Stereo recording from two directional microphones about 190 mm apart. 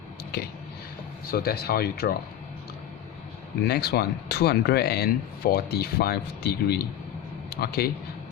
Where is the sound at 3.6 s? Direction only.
60° left (ahead or behind).